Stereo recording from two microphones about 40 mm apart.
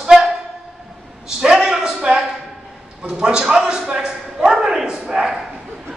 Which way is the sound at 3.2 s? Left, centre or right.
Centre.